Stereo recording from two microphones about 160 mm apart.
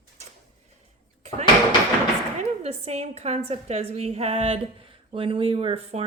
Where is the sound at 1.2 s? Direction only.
45° right (ahead or behind).